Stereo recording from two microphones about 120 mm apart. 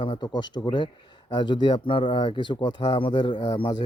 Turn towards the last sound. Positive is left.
turn(degrees=40)  # may be behind; listen again after turning